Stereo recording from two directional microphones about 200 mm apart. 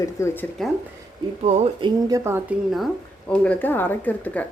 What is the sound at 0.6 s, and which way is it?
Speech, centre (ahead or behind).